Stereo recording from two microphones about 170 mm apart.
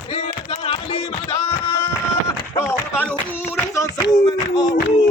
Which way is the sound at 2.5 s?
10° left (ahead or behind).